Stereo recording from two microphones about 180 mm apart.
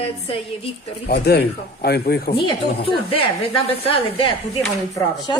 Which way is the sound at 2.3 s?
30° left (ahead or behind).